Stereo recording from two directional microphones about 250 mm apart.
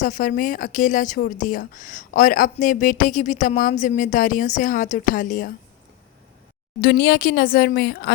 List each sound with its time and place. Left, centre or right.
0.0 s a woman's voice: left
6.8 s a woman's voice: left